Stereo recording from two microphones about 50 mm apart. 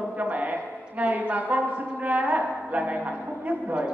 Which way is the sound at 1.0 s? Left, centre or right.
Right.